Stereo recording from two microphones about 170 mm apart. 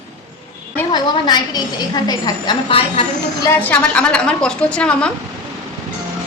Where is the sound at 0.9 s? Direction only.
25° left (ahead or behind).